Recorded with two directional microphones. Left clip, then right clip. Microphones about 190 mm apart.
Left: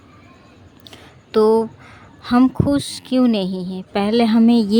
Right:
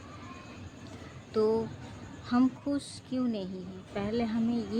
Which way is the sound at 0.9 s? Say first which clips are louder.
Left 13 dB; 60° left (ahead or behind).